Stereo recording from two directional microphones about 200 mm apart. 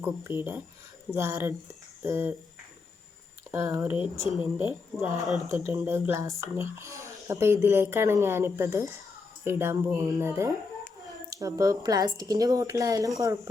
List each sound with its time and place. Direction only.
0.0 s speech: 10° right (ahead or behind)
3.5 s speech: 15° right (ahead or behind)